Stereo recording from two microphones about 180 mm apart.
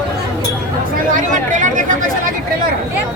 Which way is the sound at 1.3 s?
45° right (ahead or behind).